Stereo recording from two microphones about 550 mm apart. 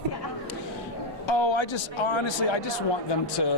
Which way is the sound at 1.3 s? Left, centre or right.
Left.